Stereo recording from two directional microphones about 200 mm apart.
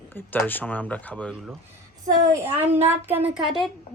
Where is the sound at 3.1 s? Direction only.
10° right (ahead or behind).